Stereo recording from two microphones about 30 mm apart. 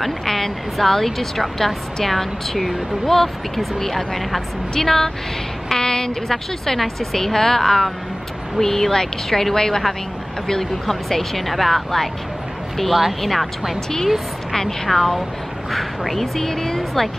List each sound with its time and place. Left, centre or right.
0.0 s a woman's voice: centre
5.7 s a woman's voice: left
6.2 s speech: centre
13.2 s a woman's voice: centre
14.9 s a woman's voice: centre